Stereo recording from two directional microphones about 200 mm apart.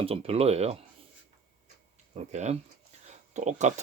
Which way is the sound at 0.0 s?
30° right (ahead or behind).